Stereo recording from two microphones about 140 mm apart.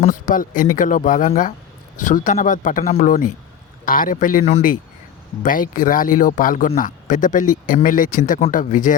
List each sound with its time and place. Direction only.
0.1 s speech: 75° left (ahead or behind)
3.8 s speech: 80° left